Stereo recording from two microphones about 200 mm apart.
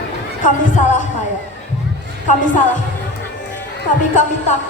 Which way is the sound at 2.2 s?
40° left (ahead or behind).